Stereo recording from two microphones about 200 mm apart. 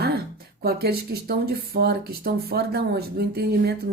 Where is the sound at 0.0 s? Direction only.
50° right (ahead or behind).